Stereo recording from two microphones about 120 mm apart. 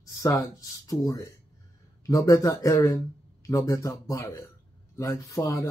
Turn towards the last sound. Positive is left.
turn(degrees=25)  # may be behind; listen again after turning